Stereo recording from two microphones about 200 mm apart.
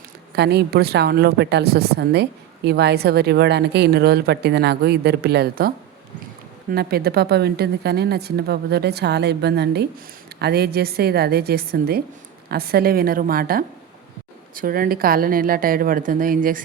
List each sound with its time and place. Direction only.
0.3 s a woman's voice: 55° right (ahead or behind)